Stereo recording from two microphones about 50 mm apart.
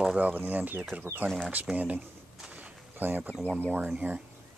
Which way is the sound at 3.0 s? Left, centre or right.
Right.